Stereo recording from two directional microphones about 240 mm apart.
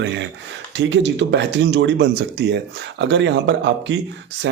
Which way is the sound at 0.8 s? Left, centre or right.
Right.